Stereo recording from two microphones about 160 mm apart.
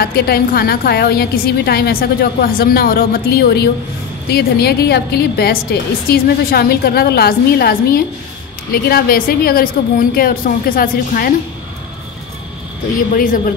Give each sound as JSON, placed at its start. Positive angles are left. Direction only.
{"t": 0.0, "sound": "a woman's voice", "side_deg": 75}
{"t": 13.1, "sound": "speech", "side_deg": 55}